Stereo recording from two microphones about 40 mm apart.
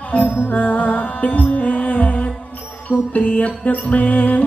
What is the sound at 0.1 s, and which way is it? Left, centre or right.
Music, left.